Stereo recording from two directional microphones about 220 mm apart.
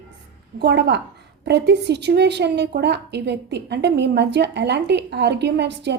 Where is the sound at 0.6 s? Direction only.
50° right (ahead or behind).